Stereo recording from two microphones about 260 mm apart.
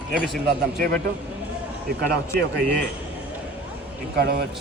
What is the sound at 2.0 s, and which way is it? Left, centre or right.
Speech, right.